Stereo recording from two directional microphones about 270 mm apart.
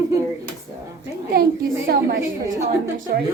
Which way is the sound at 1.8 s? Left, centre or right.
Right.